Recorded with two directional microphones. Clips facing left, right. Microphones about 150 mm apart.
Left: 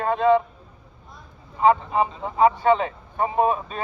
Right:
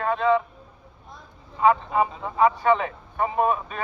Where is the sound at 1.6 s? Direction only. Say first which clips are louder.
Left 1 dB; 30° left (ahead or behind).